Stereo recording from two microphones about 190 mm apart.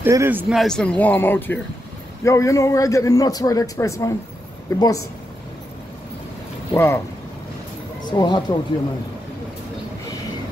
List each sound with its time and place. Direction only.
0.0 s a man's voice: 10° right (ahead or behind); by 5.0 s 20° left (ahead or behind)
6.7 s speech: 10° left (ahead or behind)
8.0 s speech: 25° left (ahead or behind)